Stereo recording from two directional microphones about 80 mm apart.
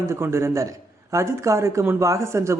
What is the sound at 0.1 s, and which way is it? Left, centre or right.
Speech, right.